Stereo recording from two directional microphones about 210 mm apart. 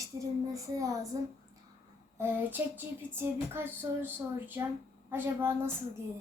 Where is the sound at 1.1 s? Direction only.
20° right (ahead or behind).